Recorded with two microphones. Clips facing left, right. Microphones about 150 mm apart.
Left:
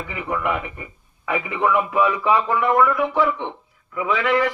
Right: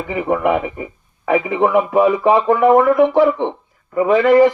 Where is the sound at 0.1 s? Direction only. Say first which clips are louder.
Right 9 dB; 45° right (ahead or behind).